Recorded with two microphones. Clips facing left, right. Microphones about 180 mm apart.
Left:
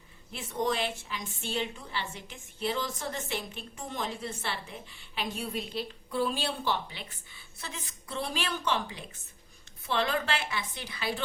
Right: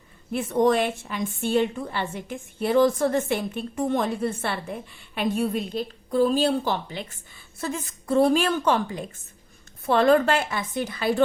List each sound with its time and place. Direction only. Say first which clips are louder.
0.3 s a woman's voice: right 11 dB; 55° right (ahead or behind)